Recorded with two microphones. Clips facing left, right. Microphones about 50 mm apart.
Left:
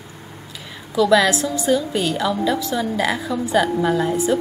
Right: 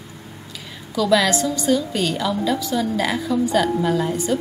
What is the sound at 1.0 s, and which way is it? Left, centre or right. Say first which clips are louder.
A woman's voice: left 2 dB; centre.